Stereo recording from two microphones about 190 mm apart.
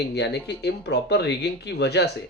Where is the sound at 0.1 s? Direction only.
60° left (ahead or behind).